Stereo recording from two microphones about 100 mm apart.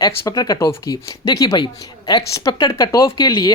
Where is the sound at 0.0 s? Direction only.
40° left (ahead or behind).